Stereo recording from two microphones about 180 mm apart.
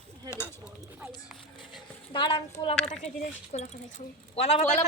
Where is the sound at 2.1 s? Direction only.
30° left (ahead or behind).